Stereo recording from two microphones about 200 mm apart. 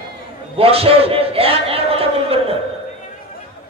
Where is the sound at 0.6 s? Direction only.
30° right (ahead or behind).